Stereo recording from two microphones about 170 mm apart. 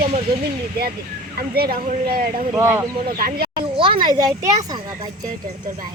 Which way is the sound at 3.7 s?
30° right (ahead or behind).